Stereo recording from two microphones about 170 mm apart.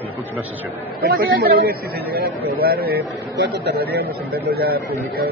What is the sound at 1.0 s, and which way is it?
A man's voice, 65° right (ahead or behind).